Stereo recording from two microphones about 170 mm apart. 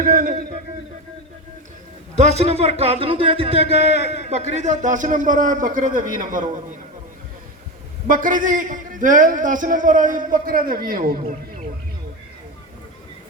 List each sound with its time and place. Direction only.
0.0 s a man's voice: 55° right (ahead or behind)
2.1 s a man's voice: 40° right (ahead or behind)
8.0 s a man's voice: 50° right (ahead or behind)